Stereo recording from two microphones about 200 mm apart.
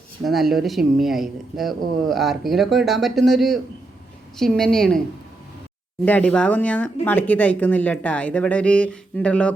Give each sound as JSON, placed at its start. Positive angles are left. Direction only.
{"t": 0.3, "sound": "speech", "side_deg": 0}
{"t": 6.1, "sound": "speech", "side_deg": 5}